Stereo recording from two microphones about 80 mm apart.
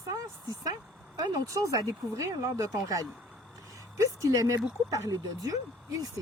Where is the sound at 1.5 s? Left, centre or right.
Right.